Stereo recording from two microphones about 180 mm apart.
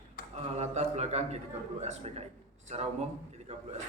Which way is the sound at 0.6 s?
35° right (ahead or behind).